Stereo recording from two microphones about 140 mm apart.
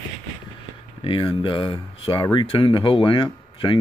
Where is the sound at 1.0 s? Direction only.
40° left (ahead or behind).